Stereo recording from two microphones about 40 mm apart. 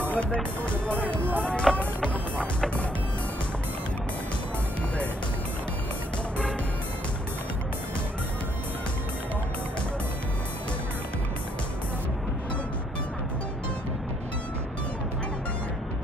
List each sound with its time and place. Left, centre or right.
0.1 s speech: left
1.8 s music: left